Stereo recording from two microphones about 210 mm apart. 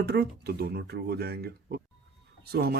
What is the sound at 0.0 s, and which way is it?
Speech, 50° right (ahead or behind).